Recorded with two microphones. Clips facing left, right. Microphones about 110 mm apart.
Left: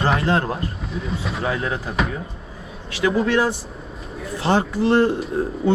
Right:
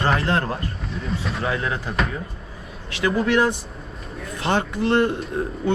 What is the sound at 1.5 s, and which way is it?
Speech, 30° left (ahead or behind).